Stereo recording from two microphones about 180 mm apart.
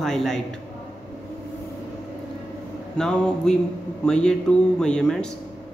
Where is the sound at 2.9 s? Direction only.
5° left (ahead or behind).